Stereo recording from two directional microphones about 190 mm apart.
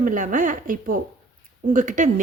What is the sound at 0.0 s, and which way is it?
Speech, 45° right (ahead or behind).